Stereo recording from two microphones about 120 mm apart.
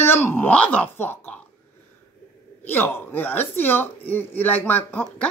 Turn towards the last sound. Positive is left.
turn(degrees=15)  # may be behind; listen again after turning